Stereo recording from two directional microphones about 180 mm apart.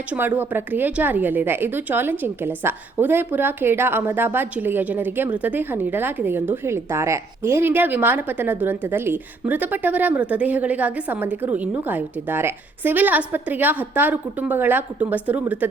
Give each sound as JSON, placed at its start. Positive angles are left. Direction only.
{"t": 0.1, "sound": "a woman's voice", "side_deg": -10}